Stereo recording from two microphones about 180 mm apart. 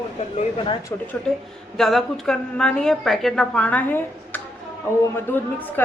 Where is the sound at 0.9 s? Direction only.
15° left (ahead or behind).